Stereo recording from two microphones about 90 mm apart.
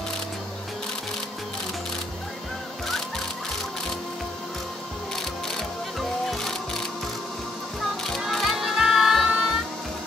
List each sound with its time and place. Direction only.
5.1 s music: centre (ahead or behind)
8.0 s music: centre (ahead or behind)